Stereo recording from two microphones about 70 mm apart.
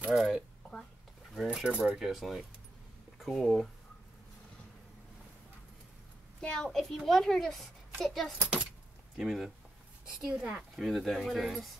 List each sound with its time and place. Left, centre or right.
0.1 s a child's voice: centre
1.8 s speech: centre
6.4 s a child's voice: centre
8.4 s a child's voice: centre
9.1 s a child's voice: centre
10.2 s speech: centre
10.8 s a child's voice: centre